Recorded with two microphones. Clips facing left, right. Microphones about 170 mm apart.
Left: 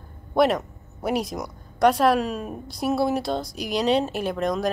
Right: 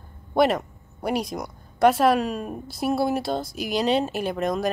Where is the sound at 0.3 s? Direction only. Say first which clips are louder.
Even; centre (ahead or behind).